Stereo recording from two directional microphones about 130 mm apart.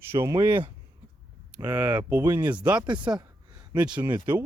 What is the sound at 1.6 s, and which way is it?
Speech, 10° right (ahead or behind).